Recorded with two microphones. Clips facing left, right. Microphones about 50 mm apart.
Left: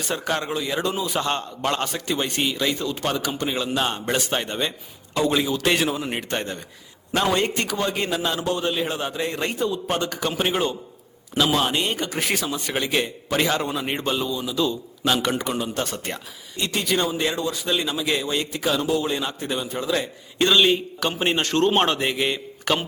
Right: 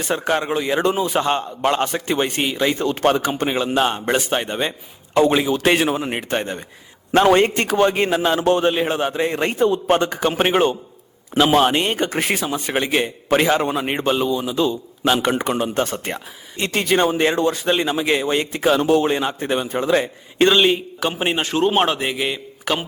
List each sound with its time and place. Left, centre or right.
0.1 s a man's voice: right
1.2 s a man's voice: centre
2.8 s a man's voice: right; by 4.7 s centre
5.1 s a man's voice: right
7.1 s a man's voice: right
8.4 s a man's voice: right
8.7 s a man's voice: right
12.3 s a man's voice: right
18.9 s a man's voice: right
19.1 s a man's voice: right; by 22.9 s centre